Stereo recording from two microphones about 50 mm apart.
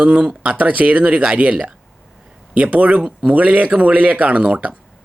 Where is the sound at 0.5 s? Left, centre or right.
Right.